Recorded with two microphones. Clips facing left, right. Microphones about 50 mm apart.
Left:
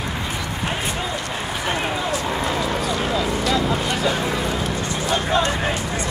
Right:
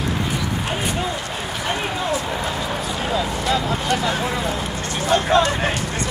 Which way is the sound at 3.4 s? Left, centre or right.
Right.